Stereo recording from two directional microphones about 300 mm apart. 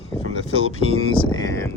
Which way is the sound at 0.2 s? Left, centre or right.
Left.